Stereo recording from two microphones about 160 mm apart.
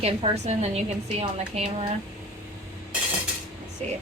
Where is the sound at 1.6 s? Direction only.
40° right (ahead or behind).